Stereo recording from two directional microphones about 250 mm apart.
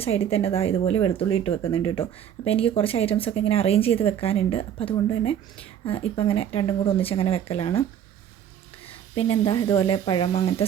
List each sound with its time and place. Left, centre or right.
0.0 s speech: left
8.9 s speech: left